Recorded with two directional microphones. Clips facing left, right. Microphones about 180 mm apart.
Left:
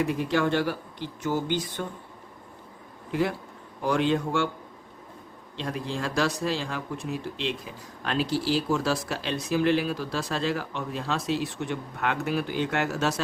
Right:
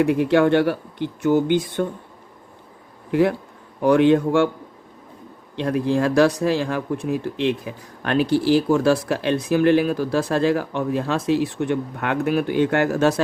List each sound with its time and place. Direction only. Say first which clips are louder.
0.0 s speech: right 8 dB; 65° right (ahead or behind)
3.1 s speech: right 8 dB; 60° right (ahead or behind)
5.5 s speech: right 11 dB; 60° right (ahead or behind)